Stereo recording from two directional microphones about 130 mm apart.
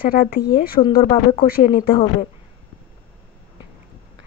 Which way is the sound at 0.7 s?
45° left (ahead or behind).